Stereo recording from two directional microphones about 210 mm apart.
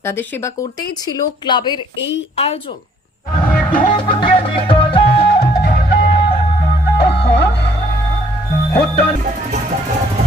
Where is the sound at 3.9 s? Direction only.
25° left (ahead or behind).